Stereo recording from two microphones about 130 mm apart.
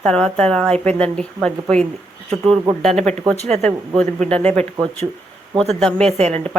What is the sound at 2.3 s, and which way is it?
Speech, 45° right (ahead or behind).